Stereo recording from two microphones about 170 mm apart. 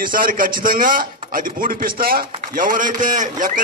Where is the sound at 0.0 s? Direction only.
55° right (ahead or behind).